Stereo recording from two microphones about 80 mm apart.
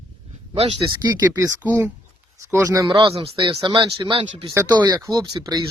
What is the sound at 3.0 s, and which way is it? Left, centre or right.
Speech, right.